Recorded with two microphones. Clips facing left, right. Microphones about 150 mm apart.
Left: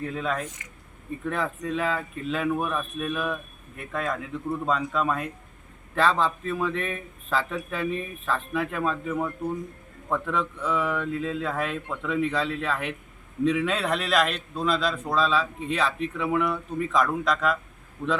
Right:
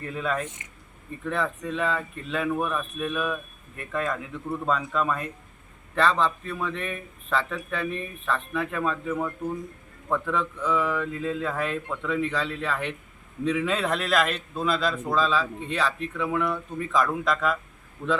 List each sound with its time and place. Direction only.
0.0 s a man's voice: centre (ahead or behind)